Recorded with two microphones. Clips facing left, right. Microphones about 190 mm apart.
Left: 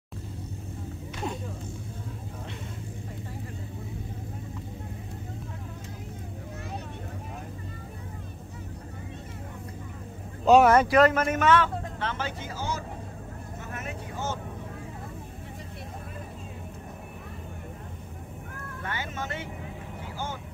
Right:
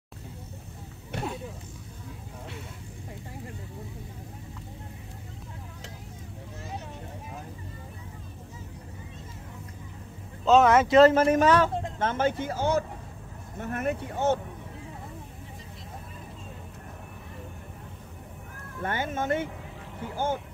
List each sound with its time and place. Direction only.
1.1 s vehicle: 60° right (ahead or behind)
10.4 s speech: 15° left (ahead or behind)
10.9 s a man's voice: 30° right (ahead or behind)
12.0 s speech: 50° right (ahead or behind)
13.6 s vehicle: 55° right (ahead or behind)
18.8 s speech: 50° right (ahead or behind)